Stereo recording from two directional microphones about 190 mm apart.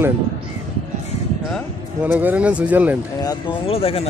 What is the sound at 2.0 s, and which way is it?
Speech, 10° right (ahead or behind).